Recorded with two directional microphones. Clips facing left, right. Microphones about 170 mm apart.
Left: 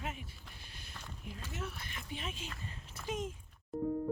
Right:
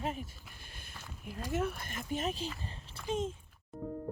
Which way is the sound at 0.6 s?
50° right (ahead or behind).